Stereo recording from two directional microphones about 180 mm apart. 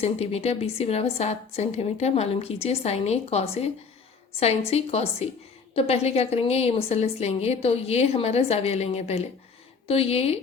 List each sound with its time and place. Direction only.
0.0 s a woman's voice: 35° left (ahead or behind)